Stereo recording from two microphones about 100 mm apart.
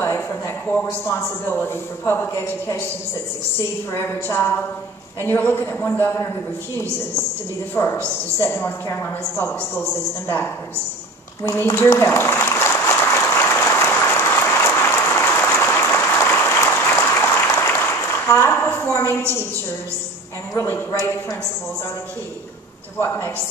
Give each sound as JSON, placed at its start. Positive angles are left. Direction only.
{"t": 0.0, "sound": "a man's voice", "side_deg": 25}
{"t": 3.9, "sound": "a man's voice", "side_deg": 25}
{"t": 7.7, "sound": "a man's voice", "side_deg": 20}
{"t": 11.4, "sound": "a woman's voice", "side_deg": 30}
{"t": 12.1, "sound": "applause", "side_deg": 20}
{"t": 20.5, "sound": "a man's voice", "side_deg": 25}
{"t": 22.9, "sound": "a man's voice", "side_deg": 25}